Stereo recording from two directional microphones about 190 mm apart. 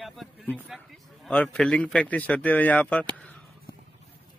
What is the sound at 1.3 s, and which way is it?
A man's voice, 5° left (ahead or behind).